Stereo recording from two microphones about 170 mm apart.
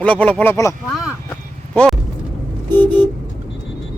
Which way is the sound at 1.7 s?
Centre (ahead or behind).